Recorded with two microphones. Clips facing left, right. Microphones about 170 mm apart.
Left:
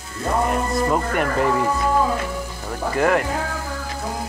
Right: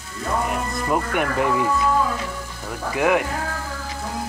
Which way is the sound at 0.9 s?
5° right (ahead or behind).